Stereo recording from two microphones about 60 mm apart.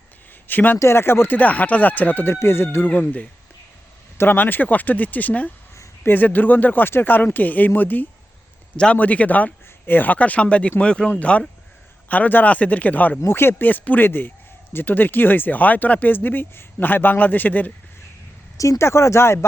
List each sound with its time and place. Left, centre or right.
0.4 s speech: left
0.8 s a man's voice: left
1.4 s speech: left
2.8 s a man's voice: left
4.2 s a man's voice: left
8.7 s a man's voice: centre
13.2 s a man's voice: left
18.5 s speech: left